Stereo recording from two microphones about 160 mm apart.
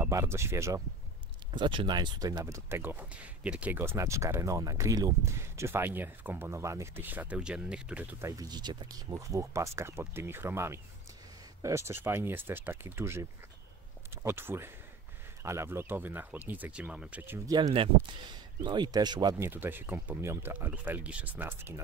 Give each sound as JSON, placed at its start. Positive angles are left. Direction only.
{"t": 0.0, "sound": "speech", "side_deg": -15}
{"t": 1.5, "sound": "speech", "side_deg": -30}
{"t": 8.3, "sound": "speech", "side_deg": -25}
{"t": 17.6, "sound": "speech", "side_deg": -35}
{"t": 19.3, "sound": "speech", "side_deg": -15}